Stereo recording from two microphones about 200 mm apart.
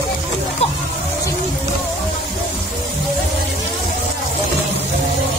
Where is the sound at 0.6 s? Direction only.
30° left (ahead or behind).